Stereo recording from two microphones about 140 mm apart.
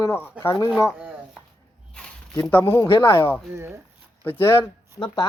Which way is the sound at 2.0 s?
5° left (ahead or behind).